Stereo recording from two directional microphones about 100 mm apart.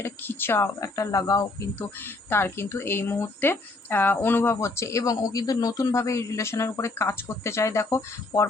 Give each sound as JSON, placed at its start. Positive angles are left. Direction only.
{"t": 0.0, "sound": "speech", "side_deg": 20}
{"t": 2.0, "sound": "speech", "side_deg": 20}